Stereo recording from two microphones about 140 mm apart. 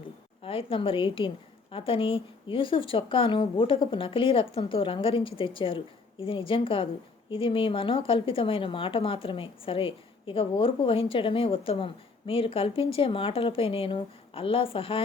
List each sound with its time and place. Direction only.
0.4 s a woman's voice: 40° left (ahead or behind)